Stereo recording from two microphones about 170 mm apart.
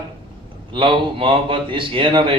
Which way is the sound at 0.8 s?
30° right (ahead or behind).